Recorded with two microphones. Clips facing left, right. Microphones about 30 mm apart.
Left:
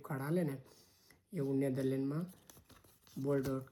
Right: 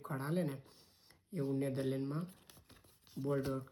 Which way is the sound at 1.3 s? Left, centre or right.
Right.